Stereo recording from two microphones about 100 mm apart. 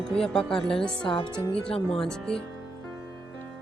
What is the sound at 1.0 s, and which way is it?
Speech, 55° left (ahead or behind).